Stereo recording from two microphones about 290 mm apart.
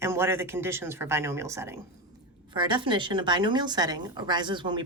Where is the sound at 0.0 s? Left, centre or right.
Centre.